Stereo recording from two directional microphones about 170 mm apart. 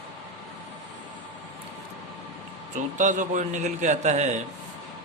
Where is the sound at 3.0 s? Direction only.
45° right (ahead or behind).